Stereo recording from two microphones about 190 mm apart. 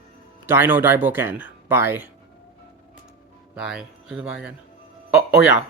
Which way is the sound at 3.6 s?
5° right (ahead or behind).